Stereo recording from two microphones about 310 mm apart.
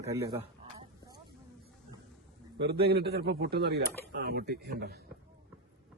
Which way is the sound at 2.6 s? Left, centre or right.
Right.